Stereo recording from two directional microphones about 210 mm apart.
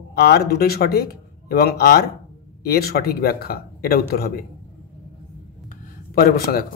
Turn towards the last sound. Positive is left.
turn(degrees=45)  # may be behind; listen again after turning